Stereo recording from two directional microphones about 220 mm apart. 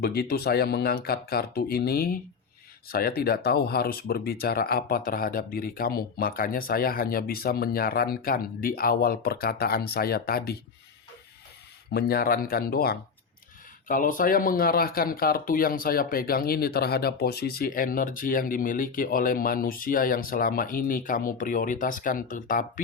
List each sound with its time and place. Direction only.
0.0 s speech: 45° left (ahead or behind)
11.9 s speech: 45° left (ahead or behind)